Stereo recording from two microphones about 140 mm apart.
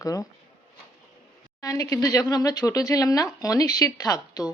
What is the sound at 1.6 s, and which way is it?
A woman's voice, 20° left (ahead or behind).